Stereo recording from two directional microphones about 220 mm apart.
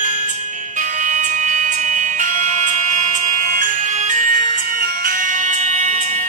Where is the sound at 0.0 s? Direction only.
35° right (ahead or behind).